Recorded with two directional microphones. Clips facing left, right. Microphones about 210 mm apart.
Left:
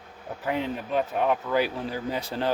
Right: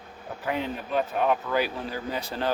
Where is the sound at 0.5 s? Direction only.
20° left (ahead or behind).